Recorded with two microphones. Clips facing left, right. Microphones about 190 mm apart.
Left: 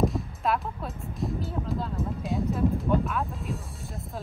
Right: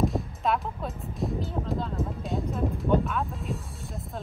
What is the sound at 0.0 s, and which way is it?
Speech, centre (ahead or behind).